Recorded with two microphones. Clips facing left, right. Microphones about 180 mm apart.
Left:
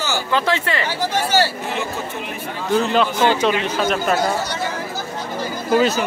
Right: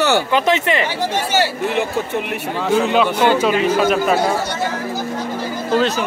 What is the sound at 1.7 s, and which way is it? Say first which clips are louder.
Speech: right 5 dB; 60° right (ahead or behind).